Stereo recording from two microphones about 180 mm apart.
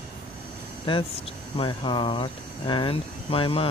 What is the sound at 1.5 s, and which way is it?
Speech, 30° left (ahead or behind).